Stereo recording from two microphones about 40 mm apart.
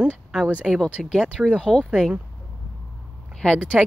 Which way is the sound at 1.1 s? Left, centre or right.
Centre.